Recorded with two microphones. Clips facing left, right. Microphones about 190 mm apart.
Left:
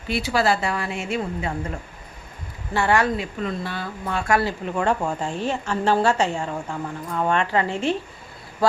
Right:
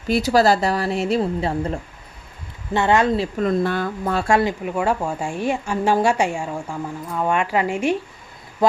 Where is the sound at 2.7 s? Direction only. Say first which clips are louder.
Right 3 dB; 20° right (ahead or behind).